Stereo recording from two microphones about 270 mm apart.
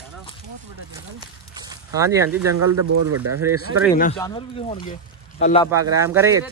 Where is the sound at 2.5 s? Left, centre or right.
Right.